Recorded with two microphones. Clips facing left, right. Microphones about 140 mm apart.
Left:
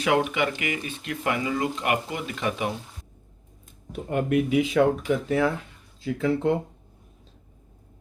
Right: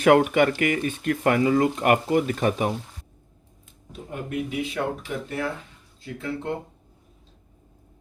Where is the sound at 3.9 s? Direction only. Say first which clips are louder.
Left 7 dB; 75° left (ahead or behind); by 5.2 s 90° left.